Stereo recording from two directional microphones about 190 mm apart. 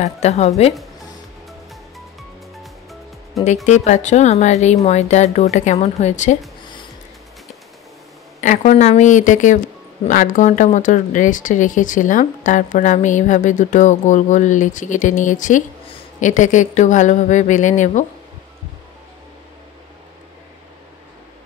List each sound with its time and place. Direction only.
0.0 s speech: 35° left (ahead or behind)
2.5 s music: centre (ahead or behind)
3.6 s speech: 40° left (ahead or behind)
8.4 s speech: 40° left (ahead or behind)